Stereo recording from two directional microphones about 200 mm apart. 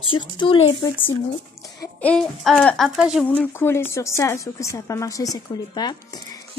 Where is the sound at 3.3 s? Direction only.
10° left (ahead or behind).